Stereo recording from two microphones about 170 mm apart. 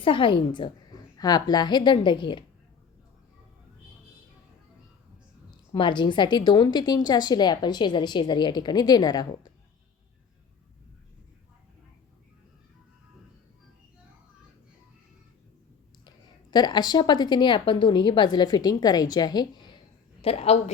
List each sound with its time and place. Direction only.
0.0 s a woman's voice: 30° left (ahead or behind)
5.5 s a woman's voice: 30° left (ahead or behind)
16.0 s a woman's voice: 25° left (ahead or behind)
20.2 s a woman's voice: 35° left (ahead or behind)